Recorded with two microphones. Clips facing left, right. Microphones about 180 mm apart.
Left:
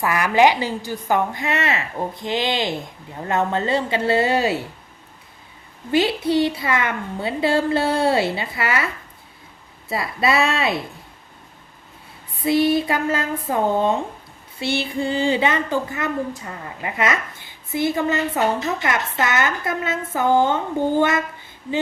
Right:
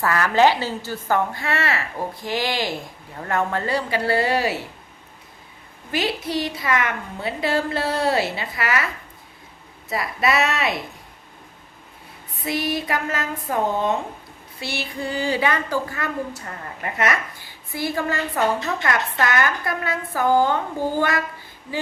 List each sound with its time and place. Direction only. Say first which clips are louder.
0.0 s a woman's voice: left 1 dB; 15° left (ahead or behind)
5.9 s a woman's voice: left 6 dB; 25° left (ahead or behind)
9.9 s a woman's voice: left 1 dB; 25° left (ahead or behind)
12.4 s a woman's voice: left 7 dB; 30° left (ahead or behind)